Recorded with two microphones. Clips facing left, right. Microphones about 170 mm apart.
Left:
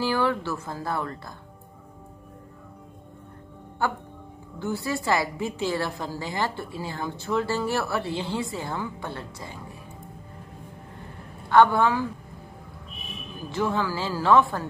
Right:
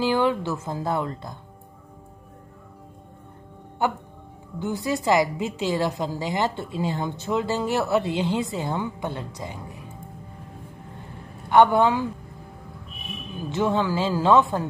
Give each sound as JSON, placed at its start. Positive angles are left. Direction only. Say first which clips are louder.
{"t": 0.0, "sound": "a woman's voice", "louder": "right 3 dB", "side_deg": -20}
{"t": 3.8, "sound": "a woman's voice", "louder": "right 3 dB", "side_deg": -20}
{"t": 11.4, "sound": "a woman's voice", "louder": "right 2 dB", "side_deg": -20}
{"t": 13.5, "sound": "a woman's voice", "louder": "right 3 dB", "side_deg": -20}